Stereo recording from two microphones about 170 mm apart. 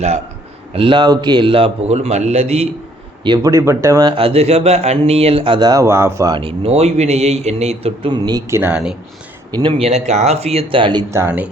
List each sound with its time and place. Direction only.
0.7 s speech: 30° right (ahead or behind)
3.2 s speech: 20° right (ahead or behind)
4.1 s speech: 35° right (ahead or behind); by 9.0 s 5° right (ahead or behind)
9.5 s speech: 25° right (ahead or behind)
11.1 s speech: 10° right (ahead or behind)